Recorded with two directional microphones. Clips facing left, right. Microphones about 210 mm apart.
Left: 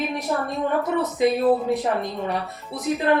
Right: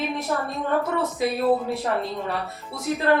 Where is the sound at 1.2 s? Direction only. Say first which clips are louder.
Left 4 dB; 20° left (ahead or behind).